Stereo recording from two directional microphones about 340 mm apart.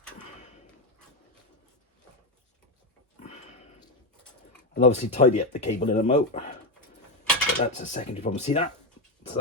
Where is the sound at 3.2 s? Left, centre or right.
Centre.